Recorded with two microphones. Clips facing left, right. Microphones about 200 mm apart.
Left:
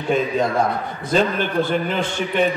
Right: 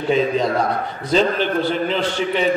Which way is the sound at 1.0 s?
50° left (ahead or behind).